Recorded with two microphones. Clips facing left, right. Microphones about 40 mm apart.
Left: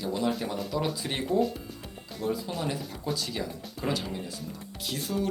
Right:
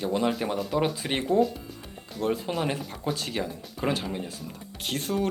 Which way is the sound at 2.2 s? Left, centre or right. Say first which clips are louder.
Right 3 dB; right.